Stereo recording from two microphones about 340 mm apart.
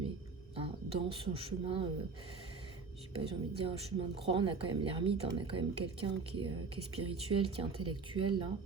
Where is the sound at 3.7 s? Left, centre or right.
Centre.